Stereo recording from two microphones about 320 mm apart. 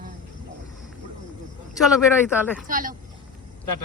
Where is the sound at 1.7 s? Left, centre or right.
Centre.